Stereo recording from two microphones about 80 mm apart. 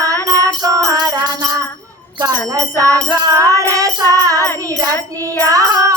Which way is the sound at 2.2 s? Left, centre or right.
Right.